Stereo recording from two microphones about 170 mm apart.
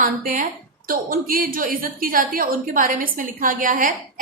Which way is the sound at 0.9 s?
55° right (ahead or behind).